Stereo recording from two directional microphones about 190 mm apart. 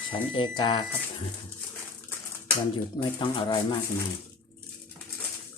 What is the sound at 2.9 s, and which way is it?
Speech, 25° left (ahead or behind).